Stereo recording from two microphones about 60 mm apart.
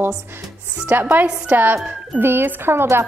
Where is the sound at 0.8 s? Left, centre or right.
Right.